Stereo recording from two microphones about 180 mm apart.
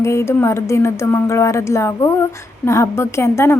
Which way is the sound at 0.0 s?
15° left (ahead or behind).